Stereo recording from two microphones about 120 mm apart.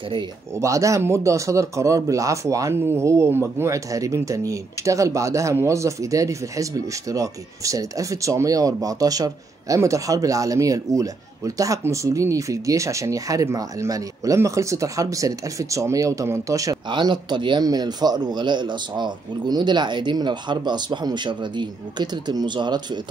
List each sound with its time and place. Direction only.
0.6 s speech: 25° right (ahead or behind)
16.9 s speech: 40° right (ahead or behind)